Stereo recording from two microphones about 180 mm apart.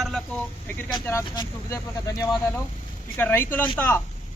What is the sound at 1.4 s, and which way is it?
Speech, 20° left (ahead or behind).